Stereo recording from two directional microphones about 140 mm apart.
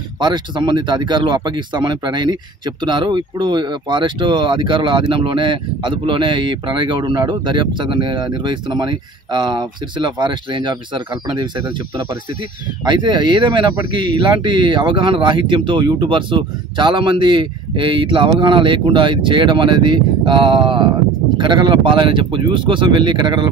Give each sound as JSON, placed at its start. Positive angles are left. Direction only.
{"t": 0.2, "sound": "speech", "side_deg": -35}